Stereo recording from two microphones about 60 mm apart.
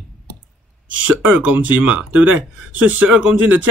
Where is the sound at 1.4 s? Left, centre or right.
Right.